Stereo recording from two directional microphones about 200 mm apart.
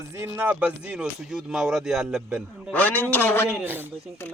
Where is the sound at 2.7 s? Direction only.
10° left (ahead or behind).